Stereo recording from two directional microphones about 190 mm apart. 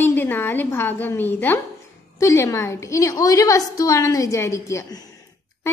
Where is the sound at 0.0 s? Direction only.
10° left (ahead or behind).